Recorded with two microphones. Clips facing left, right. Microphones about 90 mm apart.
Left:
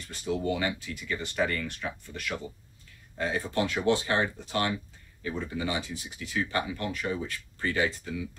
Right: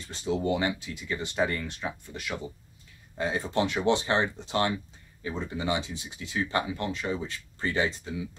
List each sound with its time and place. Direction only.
0.1 s speech: 25° right (ahead or behind)